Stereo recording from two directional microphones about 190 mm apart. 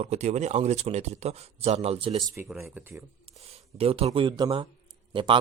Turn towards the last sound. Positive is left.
turn(degrees=-25)  # may be behind; listen again after turning